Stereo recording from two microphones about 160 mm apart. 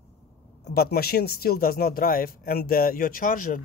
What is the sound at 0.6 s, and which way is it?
Speech, 80° left.